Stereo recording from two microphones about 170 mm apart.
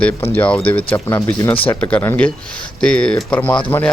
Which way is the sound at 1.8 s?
10° left (ahead or behind).